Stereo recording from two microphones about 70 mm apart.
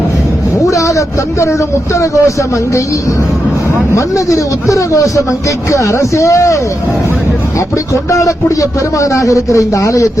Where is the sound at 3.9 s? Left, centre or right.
Left.